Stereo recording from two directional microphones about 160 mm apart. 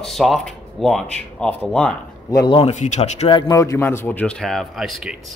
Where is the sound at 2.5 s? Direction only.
40° left (ahead or behind).